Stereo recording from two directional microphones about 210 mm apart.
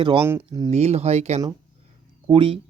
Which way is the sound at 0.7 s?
30° right (ahead or behind).